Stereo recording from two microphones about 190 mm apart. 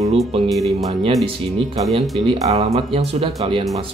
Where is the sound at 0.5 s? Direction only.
Centre (ahead or behind).